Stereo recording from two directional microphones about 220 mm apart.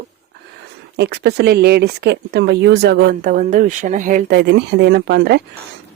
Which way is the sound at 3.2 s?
35° right (ahead or behind).